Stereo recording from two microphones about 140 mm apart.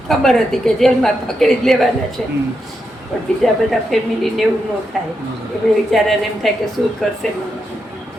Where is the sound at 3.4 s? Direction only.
Centre (ahead or behind).